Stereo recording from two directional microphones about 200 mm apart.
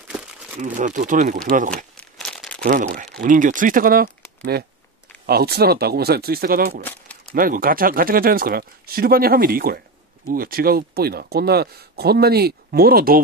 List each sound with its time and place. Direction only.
0.6 s speech: 40° right (ahead or behind)
2.0 s crumpling: 5° left (ahead or behind)
2.6 s speech: 45° right (ahead or behind)